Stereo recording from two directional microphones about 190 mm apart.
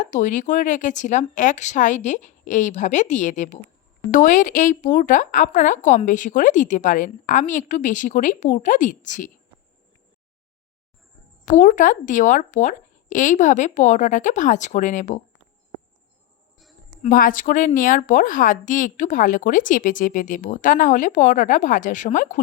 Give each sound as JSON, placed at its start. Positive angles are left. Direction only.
{"t": 0.0, "sound": "a woman's voice", "side_deg": 40}
{"t": 11.4, "sound": "speech", "side_deg": 45}
{"t": 17.0, "sound": "a woman's voice", "side_deg": 45}